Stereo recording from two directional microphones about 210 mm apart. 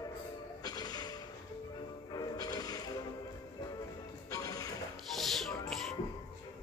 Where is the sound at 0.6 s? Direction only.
20° left (ahead or behind).